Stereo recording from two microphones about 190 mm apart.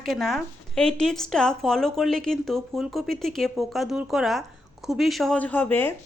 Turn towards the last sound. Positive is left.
turn(degrees=10)  # may be behind; listen again after turning